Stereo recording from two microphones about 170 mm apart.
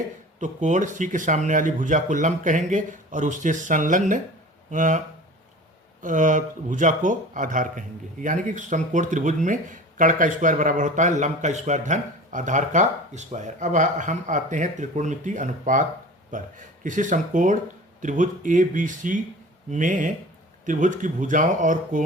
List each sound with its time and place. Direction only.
0.3 s speech: 45° right (ahead or behind)